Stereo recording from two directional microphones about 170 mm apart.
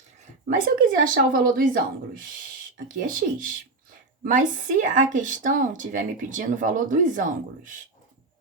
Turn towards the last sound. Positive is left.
turn(degrees=-50)  # may be behind; listen again after turning